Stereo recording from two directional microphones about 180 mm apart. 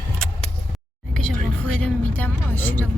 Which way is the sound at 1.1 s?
5° left (ahead or behind).